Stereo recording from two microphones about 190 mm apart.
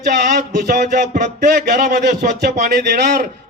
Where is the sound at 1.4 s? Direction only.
55° right (ahead or behind).